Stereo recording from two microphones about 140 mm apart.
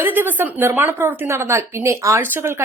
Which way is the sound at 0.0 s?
15° right (ahead or behind).